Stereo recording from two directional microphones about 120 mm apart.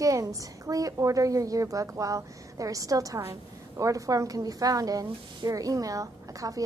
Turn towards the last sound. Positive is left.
turn(degrees=-30)  # may be behind; listen again after turning